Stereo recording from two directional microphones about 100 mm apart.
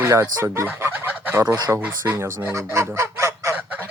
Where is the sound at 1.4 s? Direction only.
45° right (ahead or behind).